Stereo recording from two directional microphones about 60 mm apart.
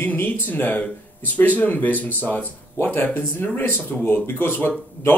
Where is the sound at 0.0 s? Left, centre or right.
Left.